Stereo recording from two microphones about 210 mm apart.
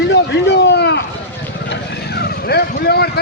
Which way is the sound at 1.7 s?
50° left (ahead or behind).